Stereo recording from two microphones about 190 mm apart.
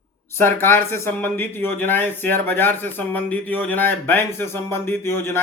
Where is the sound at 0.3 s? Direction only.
10° left (ahead or behind).